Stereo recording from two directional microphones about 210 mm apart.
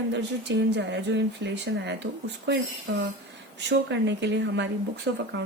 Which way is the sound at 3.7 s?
55° right (ahead or behind).